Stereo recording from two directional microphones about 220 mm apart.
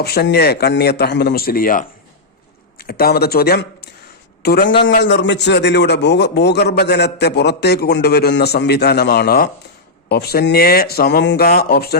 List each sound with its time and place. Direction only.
0.0 s a man's voice: 45° left (ahead or behind)